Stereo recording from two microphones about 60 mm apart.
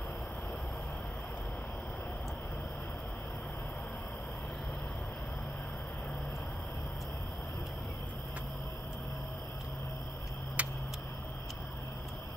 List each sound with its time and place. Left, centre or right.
10.6 s vehicle: right